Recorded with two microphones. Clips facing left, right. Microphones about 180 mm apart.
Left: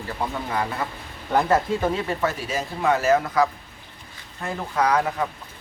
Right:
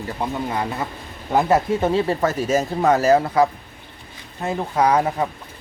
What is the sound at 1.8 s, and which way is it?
Speech, 30° right (ahead or behind).